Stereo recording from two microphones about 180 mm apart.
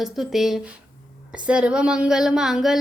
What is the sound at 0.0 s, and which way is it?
Child singing, centre (ahead or behind).